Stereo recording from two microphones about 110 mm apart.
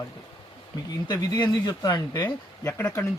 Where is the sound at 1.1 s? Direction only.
40° left (ahead or behind).